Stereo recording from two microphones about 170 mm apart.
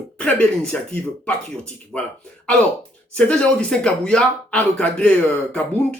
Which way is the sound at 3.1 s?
5° left (ahead or behind).